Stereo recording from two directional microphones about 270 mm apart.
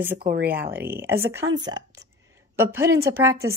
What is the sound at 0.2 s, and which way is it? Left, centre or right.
Speech, right.